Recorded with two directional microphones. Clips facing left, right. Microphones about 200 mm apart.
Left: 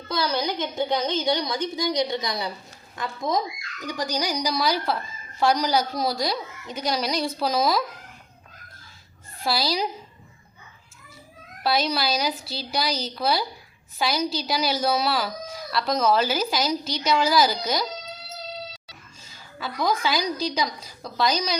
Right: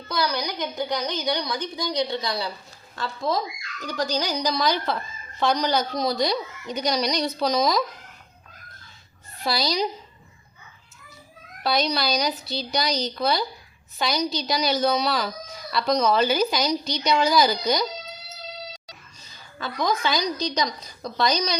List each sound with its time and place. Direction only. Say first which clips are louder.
0.1 s a woman's voice: left 1 dB; 25° left (ahead or behind); by 7.9 s 5° left (ahead or behind)
9.4 s speech: right 1 dB; 5° left (ahead or behind)
11.6 s speech: even; 5° left (ahead or behind)
19.5 s speech: even; 5° left (ahead or behind)